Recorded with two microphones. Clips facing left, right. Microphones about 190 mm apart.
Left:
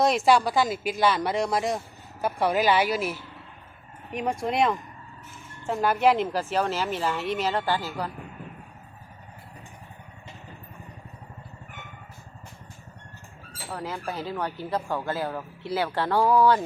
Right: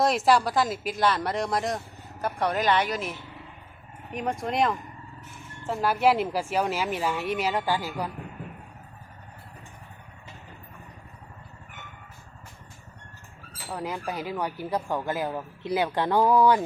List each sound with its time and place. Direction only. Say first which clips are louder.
0.3 s a woman's voice: left 1 dB; centre (ahead or behind)
13.7 s speech: right 1 dB; 15° right (ahead or behind)